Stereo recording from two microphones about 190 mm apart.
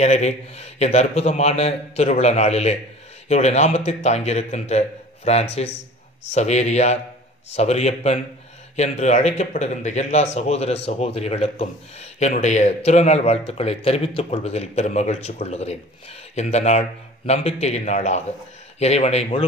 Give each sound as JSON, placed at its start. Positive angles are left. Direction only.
{"t": 0.0, "sound": "speech", "side_deg": 35}